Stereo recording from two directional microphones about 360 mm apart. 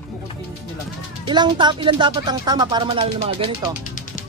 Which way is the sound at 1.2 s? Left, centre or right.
Centre.